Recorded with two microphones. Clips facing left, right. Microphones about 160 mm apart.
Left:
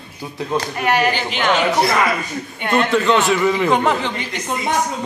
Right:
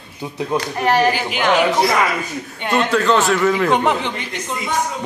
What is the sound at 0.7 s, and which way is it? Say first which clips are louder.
Speech: right 3 dB; 35° right (ahead or behind).